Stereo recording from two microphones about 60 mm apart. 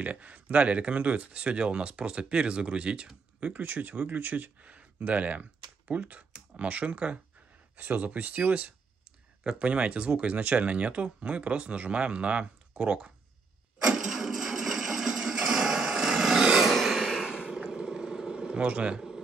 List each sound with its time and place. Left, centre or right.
0.0 s speech: right
13.8 s a sound: centre
16.7 s vehicle: centre